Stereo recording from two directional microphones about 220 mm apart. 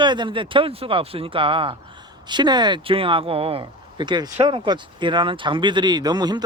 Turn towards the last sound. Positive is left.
turn(degrees=-20)  # may be behind; listen again after turning